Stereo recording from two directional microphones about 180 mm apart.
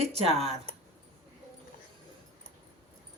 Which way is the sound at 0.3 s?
35° right (ahead or behind).